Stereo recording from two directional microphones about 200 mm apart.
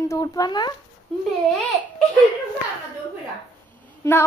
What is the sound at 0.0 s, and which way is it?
Speech, 15° left (ahead or behind).